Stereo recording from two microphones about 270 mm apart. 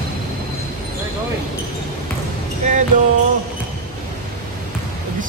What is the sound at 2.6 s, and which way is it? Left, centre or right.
Music, right.